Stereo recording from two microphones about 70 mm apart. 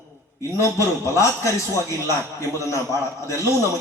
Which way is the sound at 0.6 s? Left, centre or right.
Left.